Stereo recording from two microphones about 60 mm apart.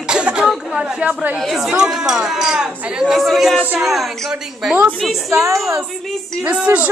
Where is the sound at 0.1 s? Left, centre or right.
Centre.